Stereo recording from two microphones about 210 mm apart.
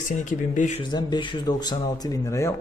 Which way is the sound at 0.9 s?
20° left (ahead or behind).